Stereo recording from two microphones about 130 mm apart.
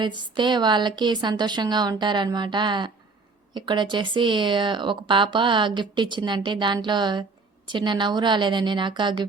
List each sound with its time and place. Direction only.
0.0 s speech: 35° right (ahead or behind)